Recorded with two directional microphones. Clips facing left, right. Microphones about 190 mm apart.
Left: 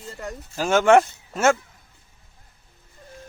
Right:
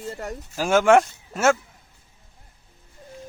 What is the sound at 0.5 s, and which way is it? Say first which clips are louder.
Speech: even; 5° right (ahead or behind).